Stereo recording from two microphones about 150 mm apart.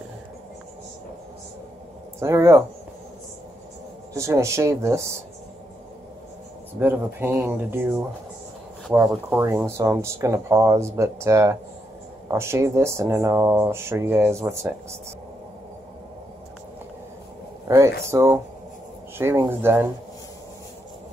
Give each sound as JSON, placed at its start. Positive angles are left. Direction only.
{"t": 2.1, "sound": "speech", "side_deg": -20}
{"t": 4.2, "sound": "speech", "side_deg": -20}
{"t": 6.8, "sound": "speech", "side_deg": -15}
{"t": 17.6, "sound": "speech", "side_deg": -20}